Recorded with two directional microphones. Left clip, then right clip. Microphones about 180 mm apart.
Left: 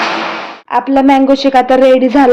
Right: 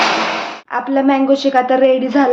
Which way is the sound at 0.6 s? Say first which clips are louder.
Left 6 dB; 40° left (ahead or behind).